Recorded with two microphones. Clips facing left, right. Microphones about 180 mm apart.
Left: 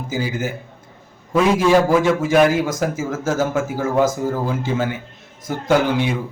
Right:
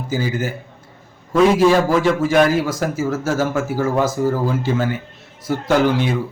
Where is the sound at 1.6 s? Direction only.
15° left (ahead or behind).